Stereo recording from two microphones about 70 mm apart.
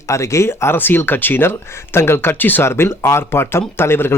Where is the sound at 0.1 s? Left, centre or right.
Left.